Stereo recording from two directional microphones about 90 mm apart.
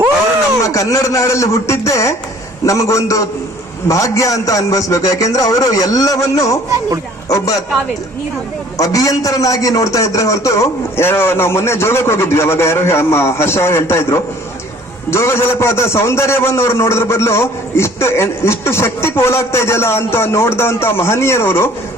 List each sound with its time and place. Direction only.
0.6 s a man's voice: 40° left (ahead or behind)
8.8 s a man's voice: 40° left (ahead or behind)